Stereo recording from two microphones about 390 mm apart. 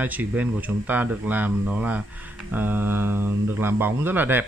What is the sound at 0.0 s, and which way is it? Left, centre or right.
Speech, centre.